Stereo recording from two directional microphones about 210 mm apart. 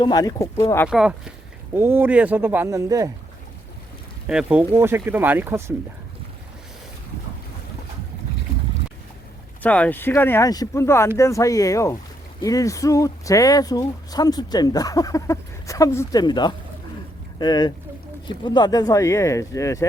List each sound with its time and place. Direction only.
0.0 s speech: 20° left (ahead or behind)
0.9 s speech: 5° right (ahead or behind)
4.3 s speech: 5° right (ahead or behind)
9.6 s speech: 5° left (ahead or behind)